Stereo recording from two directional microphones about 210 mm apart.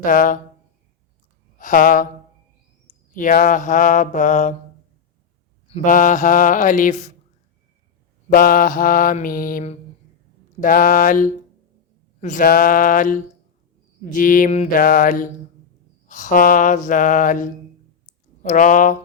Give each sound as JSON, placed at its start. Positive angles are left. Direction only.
{"t": 0.0, "sound": "mantra", "side_deg": 40}
{"t": 1.5, "sound": "mantra", "side_deg": 40}
{"t": 3.1, "sound": "mantra", "side_deg": 40}
{"t": 5.6, "sound": "mantra", "side_deg": 35}
{"t": 8.3, "sound": "mantra", "side_deg": 45}